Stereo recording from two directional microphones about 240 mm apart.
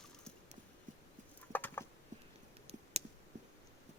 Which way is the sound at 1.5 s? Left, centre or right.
Centre.